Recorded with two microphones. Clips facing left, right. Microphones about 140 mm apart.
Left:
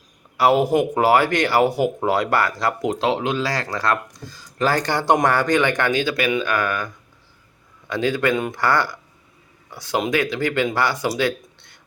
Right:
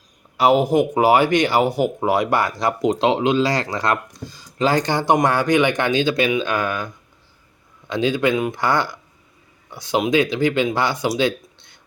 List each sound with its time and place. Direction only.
0.3 s a man's voice: 15° right (ahead or behind)
8.4 s speech: 5° right (ahead or behind)
8.6 s speech: 20° right (ahead or behind)